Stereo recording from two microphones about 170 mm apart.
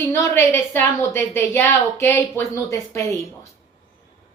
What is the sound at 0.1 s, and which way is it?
A woman's voice, 15° left (ahead or behind).